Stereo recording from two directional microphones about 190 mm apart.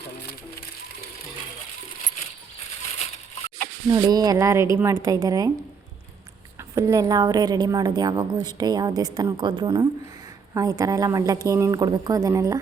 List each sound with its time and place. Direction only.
3.8 s a woman's voice: 20° right (ahead or behind)
6.7 s a woman's voice: 15° right (ahead or behind)